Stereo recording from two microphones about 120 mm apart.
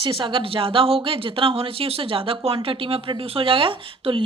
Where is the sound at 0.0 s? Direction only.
45° right (ahead or behind).